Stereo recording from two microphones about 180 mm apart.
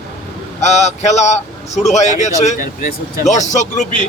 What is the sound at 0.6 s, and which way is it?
Speech, 40° left (ahead or behind).